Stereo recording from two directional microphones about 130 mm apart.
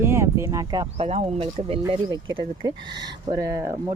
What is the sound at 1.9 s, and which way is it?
Speech, 40° right (ahead or behind).